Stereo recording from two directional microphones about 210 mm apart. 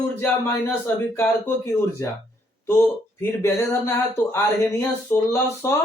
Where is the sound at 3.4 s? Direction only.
10° left (ahead or behind).